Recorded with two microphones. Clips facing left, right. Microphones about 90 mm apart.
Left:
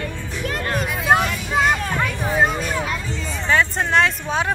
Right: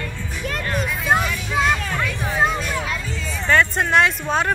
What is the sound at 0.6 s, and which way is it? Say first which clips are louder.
Hubbub: left 2 dB; 40° left (ahead or behind).